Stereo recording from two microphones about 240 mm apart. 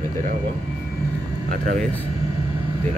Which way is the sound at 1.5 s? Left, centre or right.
Right.